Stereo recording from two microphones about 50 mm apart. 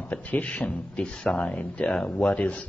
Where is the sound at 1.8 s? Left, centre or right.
Centre.